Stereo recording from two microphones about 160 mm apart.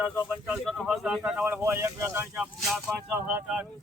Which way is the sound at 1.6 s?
15° right (ahead or behind).